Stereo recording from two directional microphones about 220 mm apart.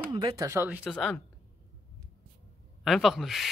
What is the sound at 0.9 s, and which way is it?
Speech, 5° left (ahead or behind).